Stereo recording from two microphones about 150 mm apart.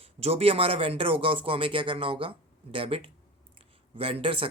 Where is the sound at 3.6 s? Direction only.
35° right (ahead or behind).